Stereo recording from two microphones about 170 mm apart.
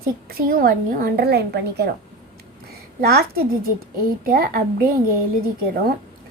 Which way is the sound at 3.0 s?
70° right (ahead or behind).